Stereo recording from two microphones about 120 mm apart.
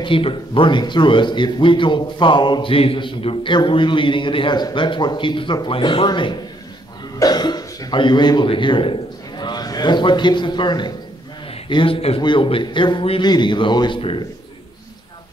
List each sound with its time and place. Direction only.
0.0 s a man's voice: 45° left (ahead or behind)
12.2 s a man's voice: 40° left (ahead or behind)